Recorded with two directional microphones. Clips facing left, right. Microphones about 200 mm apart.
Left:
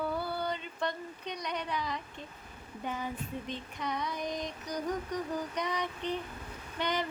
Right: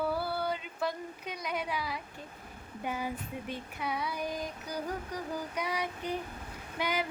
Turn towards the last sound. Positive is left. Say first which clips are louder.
# even
turn(degrees=-10)  # may be behind; listen again after turning